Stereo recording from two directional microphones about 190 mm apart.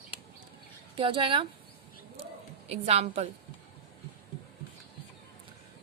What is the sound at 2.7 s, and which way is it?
Speech, 35° right (ahead or behind).